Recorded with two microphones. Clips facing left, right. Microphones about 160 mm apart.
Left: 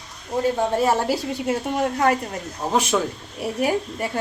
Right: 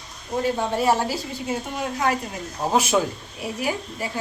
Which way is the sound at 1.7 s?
50° left (ahead or behind).